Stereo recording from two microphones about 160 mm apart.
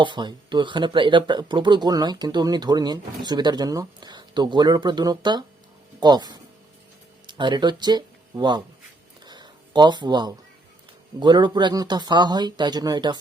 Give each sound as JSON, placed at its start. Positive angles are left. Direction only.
{"t": 0.0, "sound": "speech", "side_deg": -30}
{"t": 9.2, "sound": "a sound", "side_deg": -30}
{"t": 11.2, "sound": "speech", "side_deg": -30}